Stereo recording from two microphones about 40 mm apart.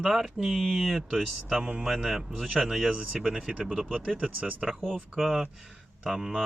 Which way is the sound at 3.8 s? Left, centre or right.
Right.